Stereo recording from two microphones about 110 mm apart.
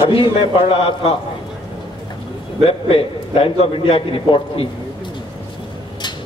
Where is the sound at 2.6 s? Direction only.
60° left (ahead or behind).